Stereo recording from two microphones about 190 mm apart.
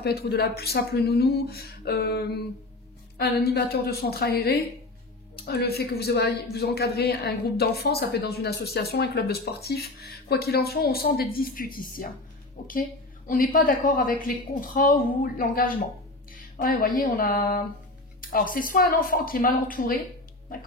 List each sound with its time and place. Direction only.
0.0 s a woman's voice: 55° left (ahead or behind)